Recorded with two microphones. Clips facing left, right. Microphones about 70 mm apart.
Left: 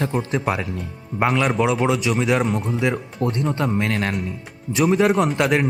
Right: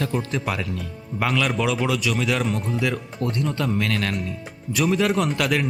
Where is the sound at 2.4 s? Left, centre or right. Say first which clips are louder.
Left 3 dB; left.